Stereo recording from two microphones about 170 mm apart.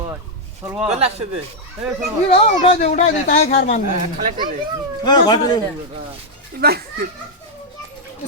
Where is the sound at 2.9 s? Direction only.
45° left (ahead or behind).